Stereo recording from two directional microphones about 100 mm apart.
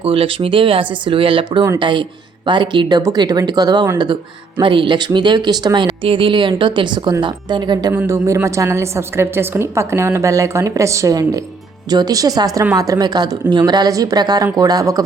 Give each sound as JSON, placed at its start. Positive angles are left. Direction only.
{"t": 0.0, "sound": "speech", "side_deg": -70}
{"t": 3.0, "sound": "speech", "side_deg": -40}
{"t": 8.0, "sound": "a woman's voice", "side_deg": -30}